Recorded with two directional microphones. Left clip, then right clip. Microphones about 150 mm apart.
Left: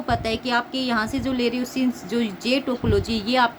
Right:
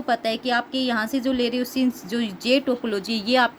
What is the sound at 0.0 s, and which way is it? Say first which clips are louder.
A woman's voice: right 1 dB; 40° right (ahead or behind).